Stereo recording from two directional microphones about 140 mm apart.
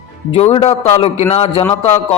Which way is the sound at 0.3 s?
45° left (ahead or behind).